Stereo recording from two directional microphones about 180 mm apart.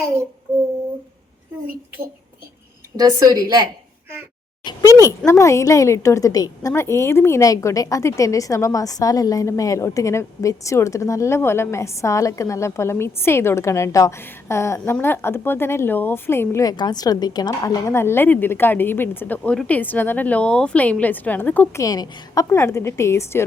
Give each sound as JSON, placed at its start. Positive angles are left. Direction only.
{"t": 2.9, "sound": "a woman's voice", "side_deg": -20}
{"t": 4.6, "sound": "a woman's voice", "side_deg": 20}